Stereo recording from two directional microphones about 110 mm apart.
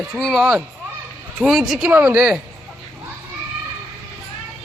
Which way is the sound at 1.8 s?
15° right (ahead or behind).